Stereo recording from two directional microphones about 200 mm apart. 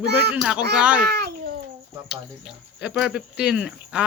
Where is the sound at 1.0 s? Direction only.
55° right (ahead or behind).